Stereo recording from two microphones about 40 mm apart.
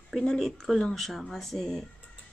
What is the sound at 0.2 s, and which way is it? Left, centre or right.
Speech, centre.